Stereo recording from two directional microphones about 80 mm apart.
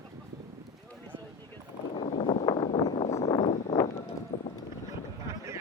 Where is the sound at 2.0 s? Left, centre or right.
Left.